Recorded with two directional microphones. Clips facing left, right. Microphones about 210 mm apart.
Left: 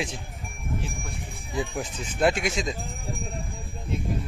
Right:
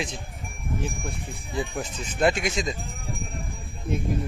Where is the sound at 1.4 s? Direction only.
Centre (ahead or behind).